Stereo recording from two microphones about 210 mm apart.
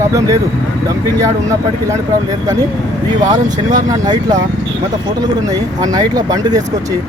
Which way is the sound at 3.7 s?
15° right (ahead or behind).